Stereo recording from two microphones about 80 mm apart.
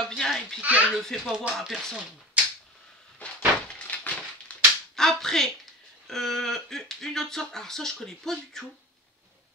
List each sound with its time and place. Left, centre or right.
0.0 s a sound: centre
0.6 s a child's voice: centre
0.9 s speech: centre
1.2 s speech: centre
3.2 s door: centre
4.5 s a sound: centre
4.9 s speech: centre